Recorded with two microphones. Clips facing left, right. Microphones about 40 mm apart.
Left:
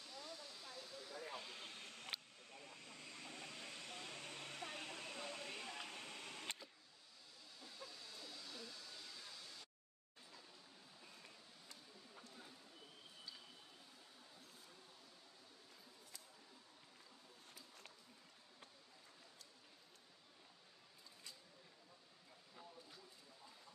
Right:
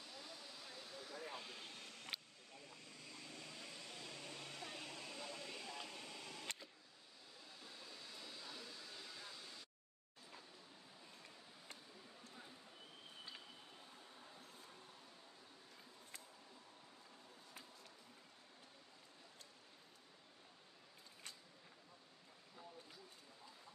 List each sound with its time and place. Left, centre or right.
0.1 s hiss: centre
1.5 s vehicle: left
7.6 s a sound: centre